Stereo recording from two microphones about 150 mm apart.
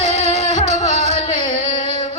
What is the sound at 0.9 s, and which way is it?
Carnatic music, 50° right (ahead or behind).